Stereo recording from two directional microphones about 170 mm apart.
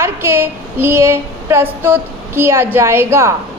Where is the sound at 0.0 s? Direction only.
15° right (ahead or behind).